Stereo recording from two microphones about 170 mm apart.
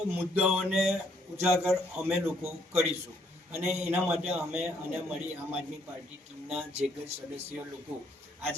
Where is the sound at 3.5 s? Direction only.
10° right (ahead or behind).